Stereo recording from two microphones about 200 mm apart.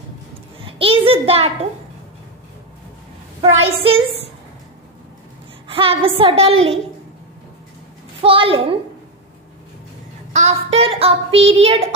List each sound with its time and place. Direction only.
0.7 s a child's voice: 25° right (ahead or behind)
3.3 s a child's voice: 30° right (ahead or behind)
5.7 s a woman's voice: 25° right (ahead or behind)
8.2 s a woman's voice: 25° right (ahead or behind)
10.3 s speech: 30° right (ahead or behind)